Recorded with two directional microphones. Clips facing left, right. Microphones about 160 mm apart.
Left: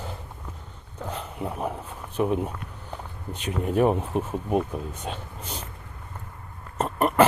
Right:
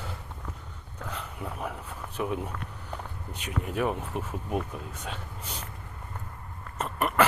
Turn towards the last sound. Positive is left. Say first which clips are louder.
# left 5 dB
turn(degrees=35)  # may be behind; listen again after turning